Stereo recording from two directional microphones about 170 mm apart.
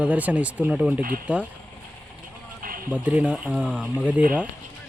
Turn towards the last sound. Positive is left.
turn(degrees=-5)  # may be behind; listen again after turning